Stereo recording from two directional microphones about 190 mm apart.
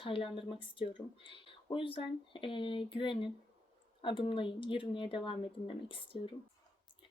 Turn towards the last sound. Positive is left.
turn(degrees=30)  # may be behind; listen again after turning